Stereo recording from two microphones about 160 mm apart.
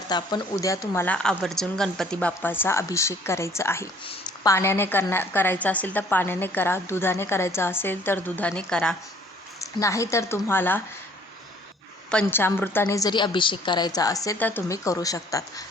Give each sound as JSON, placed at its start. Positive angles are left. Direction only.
{"t": 0.1, "sound": "a woman's voice", "side_deg": 25}
{"t": 9.6, "sound": "a woman's voice", "side_deg": 20}
{"t": 12.1, "sound": "a woman's voice", "side_deg": 15}